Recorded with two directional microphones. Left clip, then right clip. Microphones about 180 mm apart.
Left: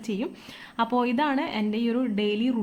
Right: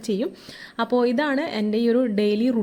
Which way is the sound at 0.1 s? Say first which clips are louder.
Right 6 dB; 30° right (ahead or behind).